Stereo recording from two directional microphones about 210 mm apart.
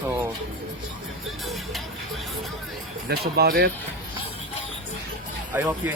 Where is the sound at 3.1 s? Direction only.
50° right (ahead or behind).